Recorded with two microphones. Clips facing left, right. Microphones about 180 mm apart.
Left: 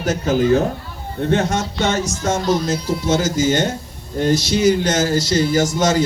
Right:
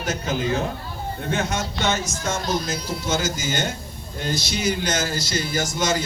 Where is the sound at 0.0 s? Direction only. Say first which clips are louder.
Left 8 dB; 40° left (ahead or behind).